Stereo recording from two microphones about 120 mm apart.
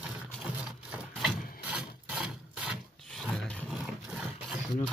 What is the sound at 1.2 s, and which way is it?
Filing, 10° right (ahead or behind).